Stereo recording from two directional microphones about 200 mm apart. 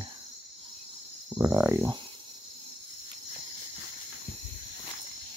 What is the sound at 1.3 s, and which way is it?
Speech, 10° right (ahead or behind).